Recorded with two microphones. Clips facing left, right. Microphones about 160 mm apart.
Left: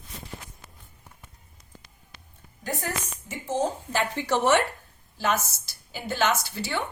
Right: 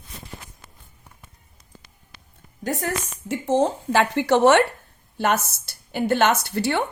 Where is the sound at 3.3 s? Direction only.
75° right (ahead or behind).